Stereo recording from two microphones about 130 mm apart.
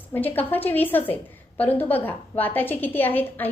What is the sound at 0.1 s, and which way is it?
A woman's voice, 15° left (ahead or behind).